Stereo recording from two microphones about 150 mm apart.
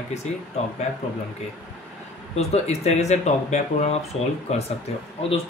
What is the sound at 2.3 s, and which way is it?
Speech, 45° left (ahead or behind).